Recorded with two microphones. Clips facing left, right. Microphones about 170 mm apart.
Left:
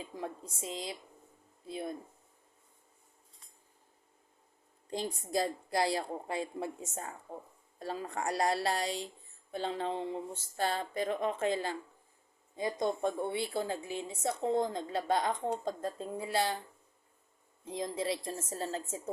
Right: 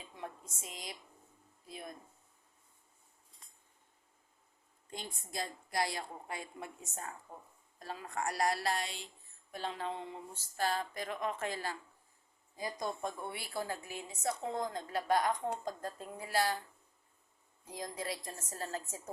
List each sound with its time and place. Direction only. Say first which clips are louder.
0.0 s a woman's voice: left 6 dB; 30° left (ahead or behind)
4.9 s a woman's voice: left 10 dB; 35° left (ahead or behind)
17.7 s a woman's voice: left 6 dB; 25° left (ahead or behind)